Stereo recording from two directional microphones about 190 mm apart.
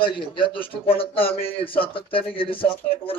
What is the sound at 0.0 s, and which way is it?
A man's voice, 25° left (ahead or behind).